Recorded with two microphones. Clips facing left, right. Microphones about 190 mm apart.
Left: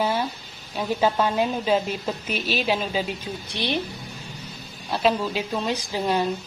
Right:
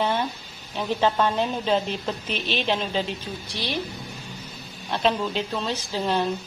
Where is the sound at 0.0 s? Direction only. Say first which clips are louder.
Even; 5° left (ahead or behind).